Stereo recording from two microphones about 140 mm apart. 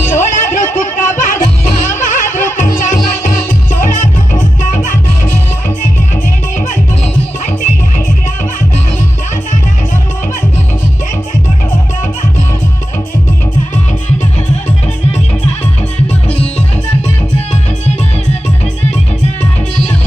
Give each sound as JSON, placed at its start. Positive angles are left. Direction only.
{"t": 0.1, "sound": "music", "side_deg": 65}